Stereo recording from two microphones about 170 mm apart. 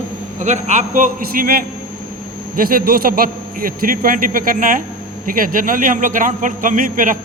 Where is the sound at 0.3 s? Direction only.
45° right (ahead or behind).